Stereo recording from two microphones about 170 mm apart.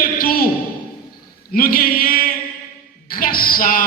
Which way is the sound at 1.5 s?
60° left (ahead or behind).